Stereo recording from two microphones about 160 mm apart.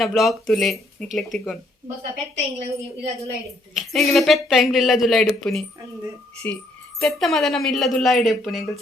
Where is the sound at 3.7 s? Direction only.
Centre (ahead or behind).